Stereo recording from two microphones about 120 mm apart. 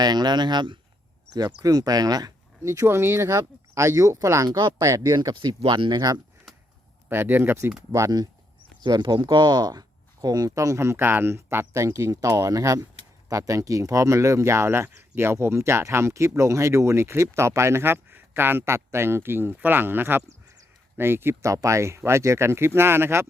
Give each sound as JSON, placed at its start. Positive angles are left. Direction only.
{"t": 0.0, "sound": "speech", "side_deg": -35}
{"t": 5.3, "sound": "speech", "side_deg": -40}
{"t": 7.1, "sound": "speech", "side_deg": -15}
{"t": 7.9, "sound": "speech", "side_deg": -30}